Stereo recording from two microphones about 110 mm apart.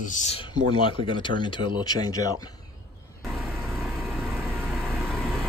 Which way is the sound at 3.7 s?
Centre (ahead or behind).